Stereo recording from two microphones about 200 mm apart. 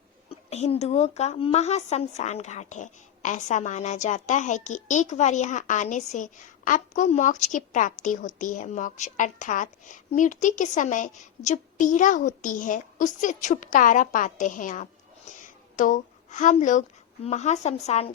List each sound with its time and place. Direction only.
0.5 s a woman's voice: 35° left (ahead or behind)
15.4 s a sound: 40° left (ahead or behind)
17.2 s a woman's voice: 35° left (ahead or behind)